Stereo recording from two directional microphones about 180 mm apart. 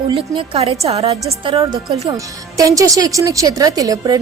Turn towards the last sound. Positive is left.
turn(degrees=-20)  # may be behind; listen again after turning